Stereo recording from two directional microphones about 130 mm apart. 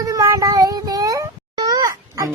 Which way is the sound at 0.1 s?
25° right (ahead or behind).